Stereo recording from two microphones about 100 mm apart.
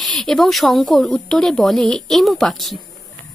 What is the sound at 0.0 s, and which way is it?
Speech, 5° left (ahead or behind).